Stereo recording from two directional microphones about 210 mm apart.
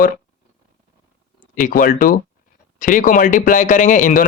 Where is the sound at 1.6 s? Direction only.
40° left (ahead or behind).